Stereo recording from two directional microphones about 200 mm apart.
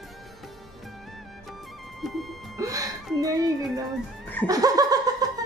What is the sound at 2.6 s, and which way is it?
Music, 15° right (ahead or behind).